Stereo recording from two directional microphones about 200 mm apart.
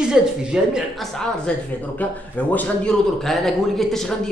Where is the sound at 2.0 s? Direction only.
5° left (ahead or behind).